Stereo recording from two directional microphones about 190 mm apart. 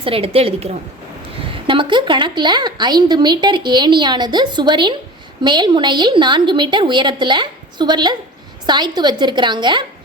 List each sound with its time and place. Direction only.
0.0 s a woman's voice: 30° right (ahead or behind)